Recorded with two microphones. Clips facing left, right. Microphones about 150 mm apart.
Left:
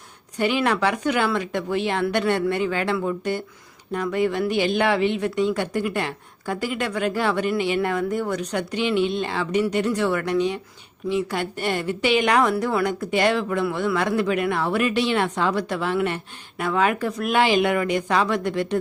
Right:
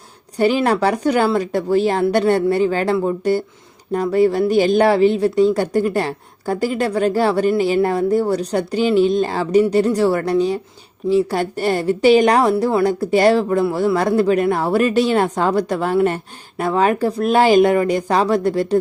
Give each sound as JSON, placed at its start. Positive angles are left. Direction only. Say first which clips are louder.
{"t": 0.3, "sound": "a woman's voice", "louder": "right 6 dB", "side_deg": -35}